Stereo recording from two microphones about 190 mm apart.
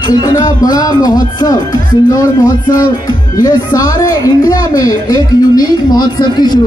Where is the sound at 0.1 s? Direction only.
20° left (ahead or behind).